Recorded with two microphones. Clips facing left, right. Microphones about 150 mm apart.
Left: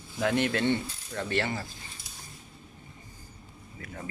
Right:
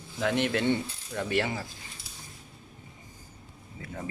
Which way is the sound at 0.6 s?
10° right (ahead or behind).